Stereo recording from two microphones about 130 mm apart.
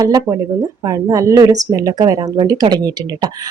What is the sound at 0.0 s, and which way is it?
Speech, 25° right (ahead or behind).